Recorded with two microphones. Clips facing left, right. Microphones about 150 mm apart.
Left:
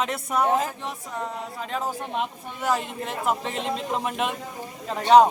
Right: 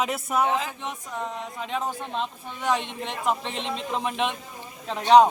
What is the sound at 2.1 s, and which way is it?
Speech, 10° left (ahead or behind).